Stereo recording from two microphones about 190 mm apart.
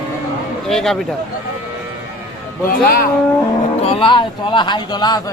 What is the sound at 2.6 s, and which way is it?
Speech, 50° left (ahead or behind).